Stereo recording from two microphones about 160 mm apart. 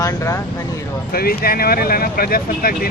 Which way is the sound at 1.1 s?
70° left (ahead or behind).